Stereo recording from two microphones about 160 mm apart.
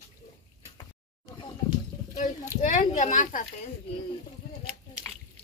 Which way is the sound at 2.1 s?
50° left (ahead or behind).